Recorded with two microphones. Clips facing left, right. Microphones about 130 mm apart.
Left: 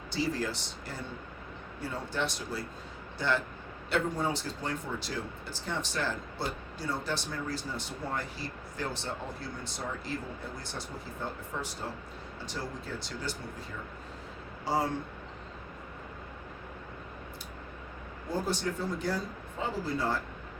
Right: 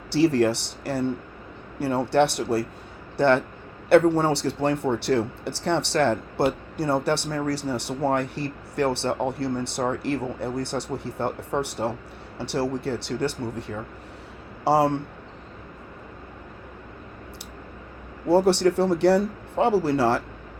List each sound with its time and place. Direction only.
0.1 s speech: 70° right (ahead or behind)
18.3 s speech: 75° right (ahead or behind)